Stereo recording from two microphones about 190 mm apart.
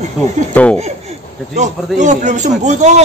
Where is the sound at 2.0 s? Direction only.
40° right (ahead or behind).